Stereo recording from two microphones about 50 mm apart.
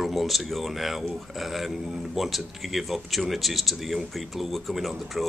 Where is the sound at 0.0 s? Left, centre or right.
Centre.